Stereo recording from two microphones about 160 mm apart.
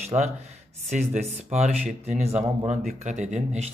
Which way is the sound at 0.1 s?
30° right (ahead or behind).